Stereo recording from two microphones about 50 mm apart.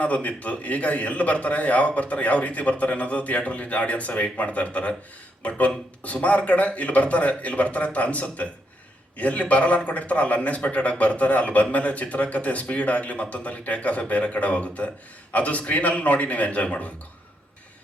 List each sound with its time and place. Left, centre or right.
0.0 s a man's voice: left